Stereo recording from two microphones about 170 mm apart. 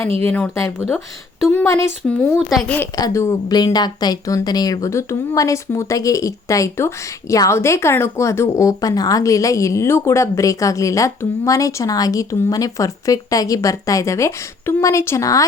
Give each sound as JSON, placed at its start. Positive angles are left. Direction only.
{"t": 0.3, "sound": "speech", "side_deg": 10}
{"t": 2.0, "sound": "speech", "side_deg": 5}
{"t": 3.0, "sound": "speech", "side_deg": 15}